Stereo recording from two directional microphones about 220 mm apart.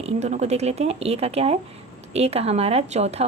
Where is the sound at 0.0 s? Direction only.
30° right (ahead or behind).